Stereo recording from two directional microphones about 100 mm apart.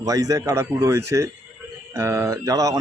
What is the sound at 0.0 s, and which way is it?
Speech, 35° right (ahead or behind).